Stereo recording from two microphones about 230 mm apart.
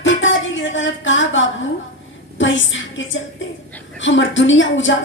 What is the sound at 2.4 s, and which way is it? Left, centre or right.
A woman's voice, left.